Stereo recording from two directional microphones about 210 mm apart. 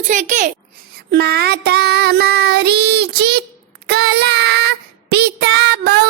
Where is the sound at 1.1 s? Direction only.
50° right (ahead or behind).